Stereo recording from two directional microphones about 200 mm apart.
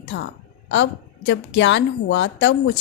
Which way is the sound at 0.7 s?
60° left (ahead or behind).